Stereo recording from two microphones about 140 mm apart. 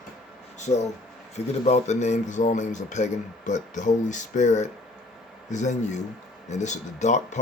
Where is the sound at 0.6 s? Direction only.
55° left (ahead or behind).